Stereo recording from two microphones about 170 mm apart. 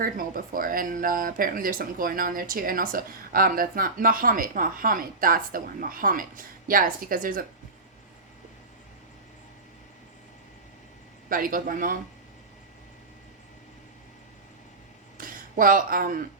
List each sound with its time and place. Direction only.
0.0 s speech: 55° right (ahead or behind)
11.3 s speech: 55° right (ahead or behind)
15.2 s speech: 55° right (ahead or behind)